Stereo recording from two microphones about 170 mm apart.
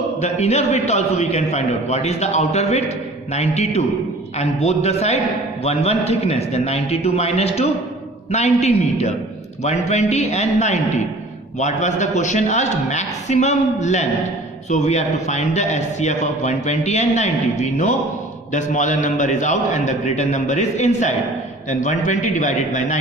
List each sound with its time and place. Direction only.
0.2 s a man's voice: 40° left (ahead or behind)